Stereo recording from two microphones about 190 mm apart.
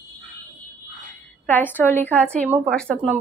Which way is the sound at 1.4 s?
10° left (ahead or behind).